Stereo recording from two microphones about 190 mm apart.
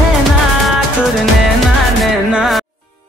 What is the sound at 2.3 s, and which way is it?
Music, centre (ahead or behind).